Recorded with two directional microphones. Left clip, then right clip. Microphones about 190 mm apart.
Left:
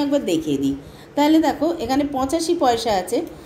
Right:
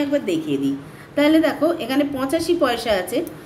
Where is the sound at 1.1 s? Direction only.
20° left (ahead or behind).